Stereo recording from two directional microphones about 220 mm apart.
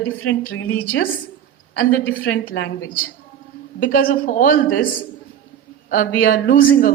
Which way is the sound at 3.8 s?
40° left (ahead or behind).